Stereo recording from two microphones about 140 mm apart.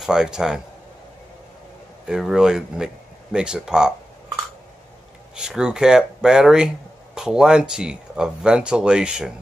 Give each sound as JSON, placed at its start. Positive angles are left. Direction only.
{"t": 0.0, "sound": "speech", "side_deg": -5}
{"t": 2.0, "sound": "speech", "side_deg": -5}
{"t": 5.3, "sound": "speech", "side_deg": -5}